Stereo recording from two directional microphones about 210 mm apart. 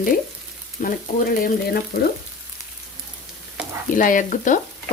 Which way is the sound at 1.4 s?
45° left (ahead or behind).